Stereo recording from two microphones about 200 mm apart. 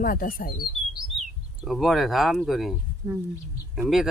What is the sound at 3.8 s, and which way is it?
Speech, centre (ahead or behind).